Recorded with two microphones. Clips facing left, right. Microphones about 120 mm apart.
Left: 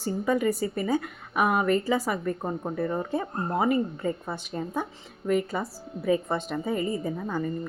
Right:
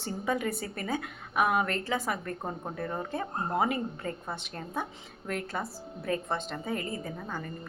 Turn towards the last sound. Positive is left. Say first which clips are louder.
# left 8 dB
turn(degrees=10)  # may be behind; listen again after turning